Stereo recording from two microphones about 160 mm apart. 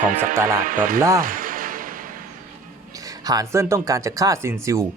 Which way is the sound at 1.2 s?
60° right (ahead or behind).